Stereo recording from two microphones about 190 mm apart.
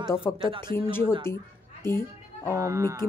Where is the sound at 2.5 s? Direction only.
15° right (ahead or behind).